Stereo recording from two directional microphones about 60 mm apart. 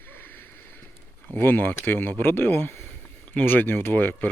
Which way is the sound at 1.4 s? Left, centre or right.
Left.